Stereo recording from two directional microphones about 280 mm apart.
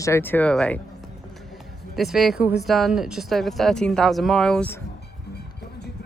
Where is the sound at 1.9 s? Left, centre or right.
Centre.